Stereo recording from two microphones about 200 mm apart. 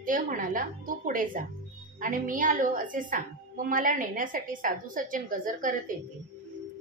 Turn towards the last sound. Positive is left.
turn(degrees=-40)  # may be behind; listen again after turning